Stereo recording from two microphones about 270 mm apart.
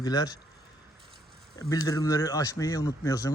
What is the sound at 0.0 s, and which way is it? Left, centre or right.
Speech, centre.